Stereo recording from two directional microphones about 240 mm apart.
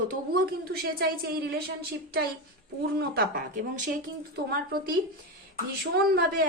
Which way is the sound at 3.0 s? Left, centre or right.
Right.